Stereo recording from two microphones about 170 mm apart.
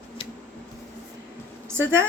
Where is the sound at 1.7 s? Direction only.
15° right (ahead or behind).